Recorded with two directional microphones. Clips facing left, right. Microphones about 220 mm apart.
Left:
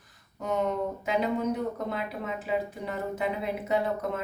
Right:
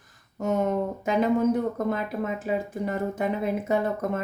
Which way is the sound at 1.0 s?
45° right (ahead or behind).